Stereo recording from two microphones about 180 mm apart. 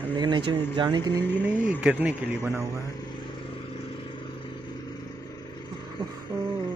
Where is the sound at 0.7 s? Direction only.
25° right (ahead or behind).